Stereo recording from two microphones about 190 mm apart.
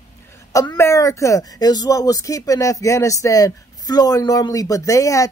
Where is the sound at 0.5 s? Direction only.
15° left (ahead or behind).